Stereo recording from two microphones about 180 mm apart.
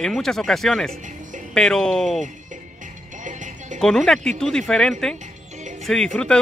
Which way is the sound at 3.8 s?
5° left (ahead or behind).